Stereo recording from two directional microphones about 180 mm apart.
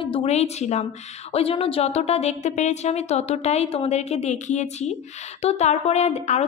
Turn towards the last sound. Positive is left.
turn(degrees=40)  # may be behind; listen again after turning